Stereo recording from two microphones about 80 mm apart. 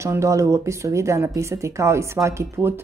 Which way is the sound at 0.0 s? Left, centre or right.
Right.